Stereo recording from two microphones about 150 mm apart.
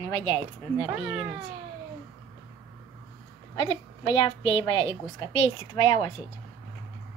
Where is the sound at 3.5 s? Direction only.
30° left (ahead or behind).